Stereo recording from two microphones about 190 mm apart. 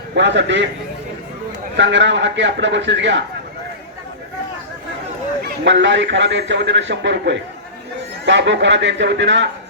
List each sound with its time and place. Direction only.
0.1 s a man's voice: 70° right (ahead or behind)
1.7 s a man's voice: 70° right (ahead or behind)
5.6 s a man's voice: 70° right (ahead or behind)